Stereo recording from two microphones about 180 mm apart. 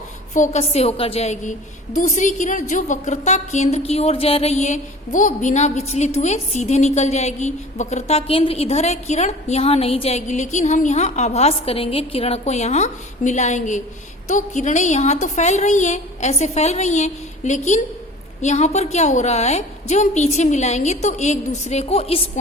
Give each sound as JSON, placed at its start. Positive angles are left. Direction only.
{"t": 0.3, "sound": "a woman's voice", "side_deg": 40}